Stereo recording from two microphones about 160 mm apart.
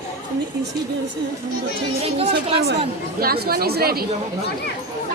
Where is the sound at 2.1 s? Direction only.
35° right (ahead or behind).